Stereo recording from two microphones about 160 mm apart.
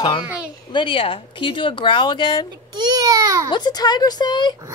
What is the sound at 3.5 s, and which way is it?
Speech, 25° left (ahead or behind).